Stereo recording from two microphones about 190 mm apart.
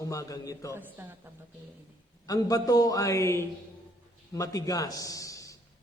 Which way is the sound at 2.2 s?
20° left (ahead or behind).